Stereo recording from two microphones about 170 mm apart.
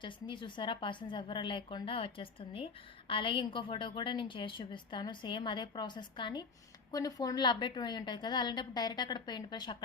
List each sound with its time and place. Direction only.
0.0 s a woman's voice: 30° left (ahead or behind)